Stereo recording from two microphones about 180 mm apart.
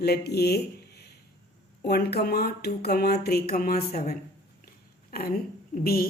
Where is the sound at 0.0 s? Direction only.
65° left (ahead or behind).